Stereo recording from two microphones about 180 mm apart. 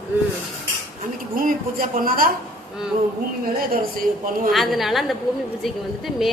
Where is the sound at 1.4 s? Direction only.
50° right (ahead or behind).